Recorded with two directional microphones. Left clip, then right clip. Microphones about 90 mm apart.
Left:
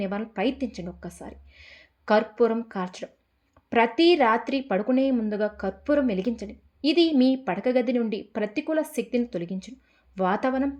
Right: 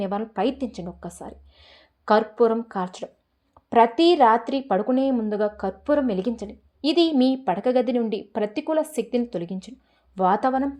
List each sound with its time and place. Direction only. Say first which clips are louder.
0.0 s a woman's voice: right 3 dB; 45° right (ahead or behind)